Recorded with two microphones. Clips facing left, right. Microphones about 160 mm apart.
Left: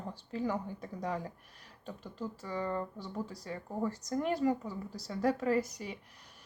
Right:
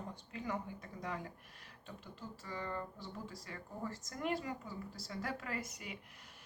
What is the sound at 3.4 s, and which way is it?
Speech, 40° left (ahead or behind).